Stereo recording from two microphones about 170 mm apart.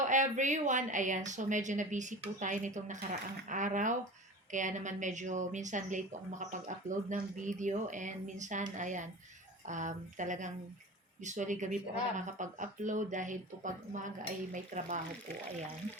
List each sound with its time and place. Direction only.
0.0 s speech: 45° right (ahead or behind)